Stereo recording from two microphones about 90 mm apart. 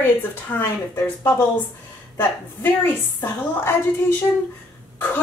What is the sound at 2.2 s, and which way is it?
A woman's voice, 25° left (ahead or behind).